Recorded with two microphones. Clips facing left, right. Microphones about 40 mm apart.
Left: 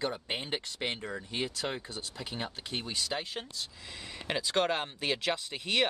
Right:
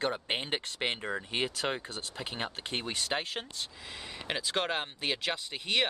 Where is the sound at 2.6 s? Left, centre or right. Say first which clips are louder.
Right 1 dB; right.